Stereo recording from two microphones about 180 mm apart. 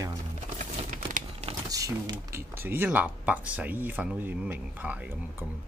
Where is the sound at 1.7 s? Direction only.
20° right (ahead or behind).